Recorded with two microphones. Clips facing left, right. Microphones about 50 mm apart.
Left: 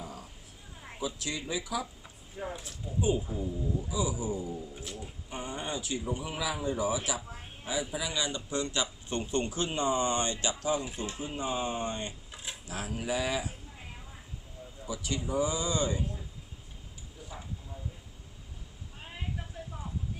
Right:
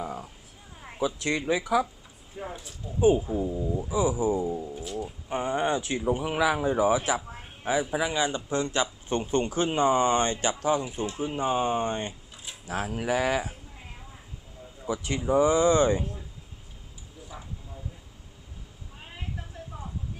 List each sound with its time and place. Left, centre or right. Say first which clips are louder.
0.9 s speech: right 7 dB; right
1.3 s speech: right 11 dB; right
2.4 s speech: right 1 dB; centre
3.8 s speech: right 10 dB; right
6.7 s speech: right 8 dB; right
14.8 s speech: right 7 dB; right